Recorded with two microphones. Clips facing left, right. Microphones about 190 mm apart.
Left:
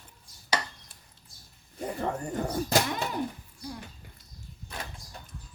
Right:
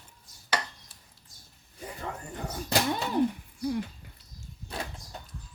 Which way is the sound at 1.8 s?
45° left (ahead or behind).